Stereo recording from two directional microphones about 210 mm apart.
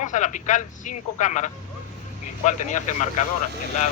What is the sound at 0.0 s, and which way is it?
A man's voice, 35° left (ahead or behind).